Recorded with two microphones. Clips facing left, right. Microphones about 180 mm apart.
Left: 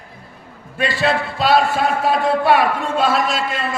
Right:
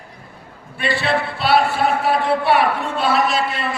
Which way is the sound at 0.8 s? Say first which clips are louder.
Left 1 dB; 45° left (ahead or behind).